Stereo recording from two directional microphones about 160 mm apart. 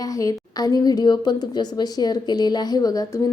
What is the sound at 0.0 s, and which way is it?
A woman's voice, 20° left (ahead or behind).